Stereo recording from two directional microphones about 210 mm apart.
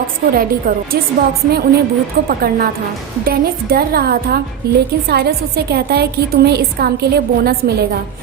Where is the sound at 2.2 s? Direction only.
50° right (ahead or behind).